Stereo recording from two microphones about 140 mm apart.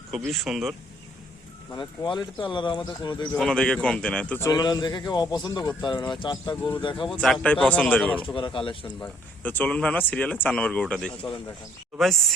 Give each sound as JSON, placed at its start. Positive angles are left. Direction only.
{"t": 0.1, "sound": "speech", "side_deg": 0}
{"t": 1.7, "sound": "speech", "side_deg": 30}
{"t": 3.3, "sound": "speech", "side_deg": 5}
{"t": 4.4, "sound": "speech", "side_deg": 25}
{"t": 7.1, "sound": "speech", "side_deg": 0}
{"t": 8.2, "sound": "speech", "side_deg": 35}
{"t": 9.4, "sound": "speech", "side_deg": 10}